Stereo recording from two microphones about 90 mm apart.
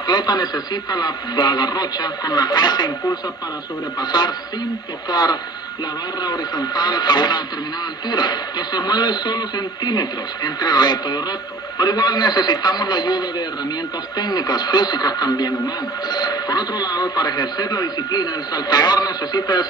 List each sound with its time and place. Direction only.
0.0 s speech: 50° left (ahead or behind)
4.0 s speech: 55° left (ahead or behind)